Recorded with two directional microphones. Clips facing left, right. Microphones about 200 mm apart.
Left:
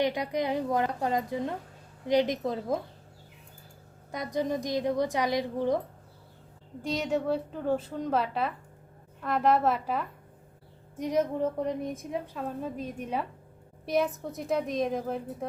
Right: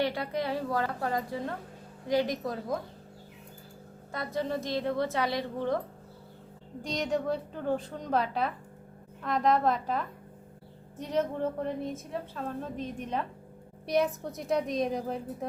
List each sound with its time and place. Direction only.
0.0 s a woman's voice: 15° left (ahead or behind)
4.1 s a woman's voice: 15° left (ahead or behind)
6.8 s a woman's voice: 5° left (ahead or behind)